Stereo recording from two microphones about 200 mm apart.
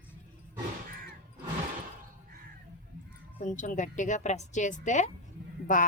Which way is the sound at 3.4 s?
40° left (ahead or behind).